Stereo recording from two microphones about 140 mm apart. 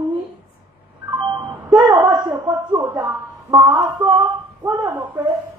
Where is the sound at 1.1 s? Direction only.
30° right (ahead or behind).